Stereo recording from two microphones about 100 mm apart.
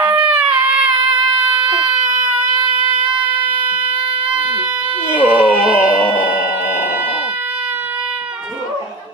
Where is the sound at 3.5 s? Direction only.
55° right (ahead or behind).